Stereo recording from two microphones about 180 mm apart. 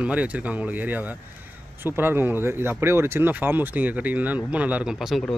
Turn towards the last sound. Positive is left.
turn(degrees=0)  # may be behind; listen again after turning